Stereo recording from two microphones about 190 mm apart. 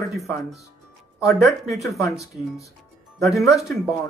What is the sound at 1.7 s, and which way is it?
Speech, centre (ahead or behind).